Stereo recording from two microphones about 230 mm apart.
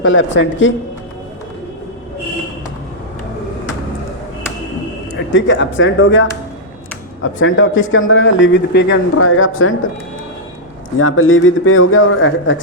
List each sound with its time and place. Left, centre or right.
0.0 s a man's voice: left
5.3 s a man's voice: left
11.0 s a man's voice: left